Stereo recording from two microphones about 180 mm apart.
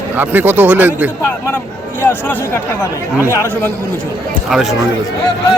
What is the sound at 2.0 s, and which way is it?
Speech, 10° left (ahead or behind).